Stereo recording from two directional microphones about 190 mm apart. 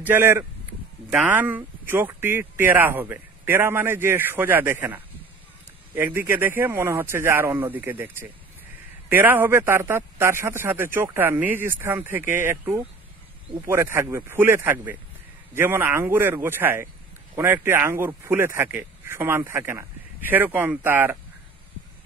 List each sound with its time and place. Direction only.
0.0 s speech: 10° right (ahead or behind)